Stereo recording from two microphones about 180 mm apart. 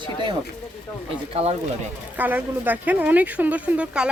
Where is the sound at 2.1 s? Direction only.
10° right (ahead or behind).